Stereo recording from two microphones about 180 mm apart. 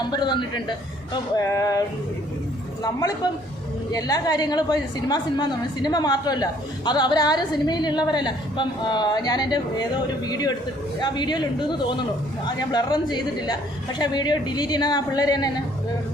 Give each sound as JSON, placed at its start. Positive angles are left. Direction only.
{"t": 0.1, "sound": "a woman's voice", "side_deg": 25}
{"t": 3.9, "sound": "a woman's voice", "side_deg": 20}